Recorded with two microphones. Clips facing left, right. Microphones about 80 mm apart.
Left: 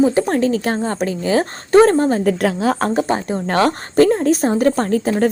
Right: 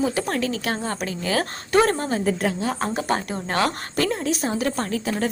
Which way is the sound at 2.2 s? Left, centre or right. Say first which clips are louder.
Left 6 dB; left.